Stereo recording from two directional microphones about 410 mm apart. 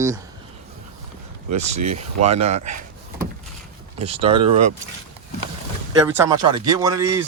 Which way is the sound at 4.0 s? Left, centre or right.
Centre.